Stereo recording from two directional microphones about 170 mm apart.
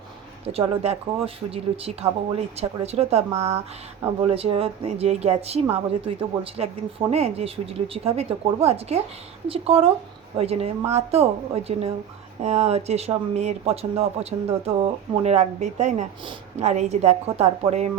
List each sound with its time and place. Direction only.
0.4 s speech: 35° right (ahead or behind)
12.4 s speech: 40° right (ahead or behind)